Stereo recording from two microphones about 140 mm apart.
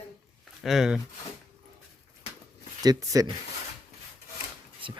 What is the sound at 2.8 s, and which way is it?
Speech, 25° right (ahead or behind).